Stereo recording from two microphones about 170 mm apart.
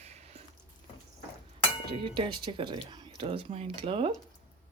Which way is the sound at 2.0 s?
30° right (ahead or behind).